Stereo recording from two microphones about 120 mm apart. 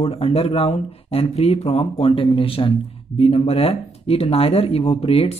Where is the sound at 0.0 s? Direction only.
55° left (ahead or behind).